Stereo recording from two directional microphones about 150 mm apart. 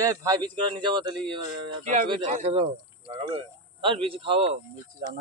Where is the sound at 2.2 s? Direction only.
45° right (ahead or behind).